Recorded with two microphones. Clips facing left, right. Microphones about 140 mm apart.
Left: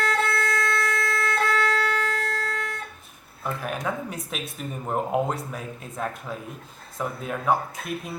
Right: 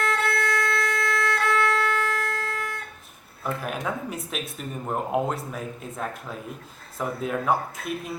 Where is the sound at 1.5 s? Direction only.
35° left (ahead or behind).